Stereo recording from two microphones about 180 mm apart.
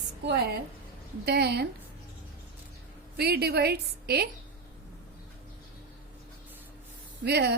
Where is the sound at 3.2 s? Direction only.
60° right (ahead or behind).